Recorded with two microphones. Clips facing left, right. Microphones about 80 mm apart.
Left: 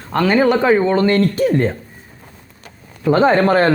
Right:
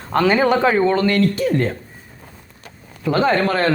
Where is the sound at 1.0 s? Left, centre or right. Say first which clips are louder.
Left 3 dB; left.